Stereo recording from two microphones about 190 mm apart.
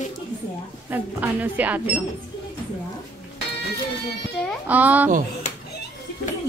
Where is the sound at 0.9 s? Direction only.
10° right (ahead or behind).